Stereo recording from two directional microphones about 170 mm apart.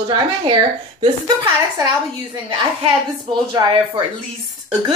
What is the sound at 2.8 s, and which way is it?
Speech, 30° right (ahead or behind).